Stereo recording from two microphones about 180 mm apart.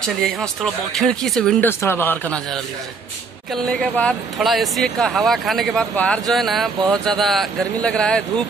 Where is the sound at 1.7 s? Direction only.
15° left (ahead or behind).